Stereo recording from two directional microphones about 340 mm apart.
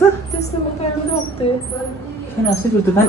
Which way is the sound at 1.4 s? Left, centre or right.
Centre.